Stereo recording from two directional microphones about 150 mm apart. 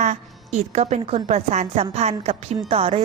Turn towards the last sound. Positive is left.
turn(degrees=-40)  # may be behind; listen again after turning